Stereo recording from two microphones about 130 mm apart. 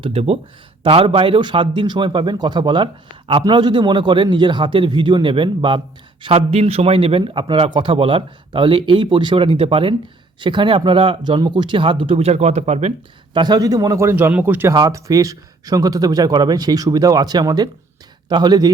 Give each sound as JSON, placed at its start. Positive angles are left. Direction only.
{"t": 0.0, "sound": "a man's voice", "side_deg": -50}
{"t": 6.2, "sound": "a man's voice", "side_deg": -50}
{"t": 13.3, "sound": "speech", "side_deg": -35}
{"t": 14.7, "sound": "a man's voice", "side_deg": -30}